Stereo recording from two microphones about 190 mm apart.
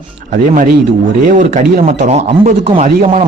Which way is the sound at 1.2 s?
45° right (ahead or behind).